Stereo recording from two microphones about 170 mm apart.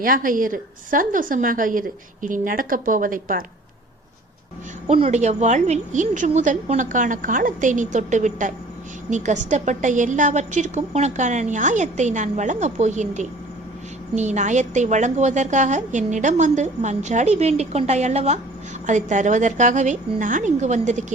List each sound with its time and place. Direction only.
0.0 s a woman's voice: 55° right (ahead or behind)
4.9 s a woman's voice: 35° right (ahead or behind)